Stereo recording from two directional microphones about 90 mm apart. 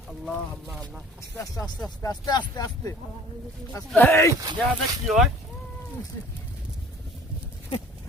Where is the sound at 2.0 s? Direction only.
45° left (ahead or behind).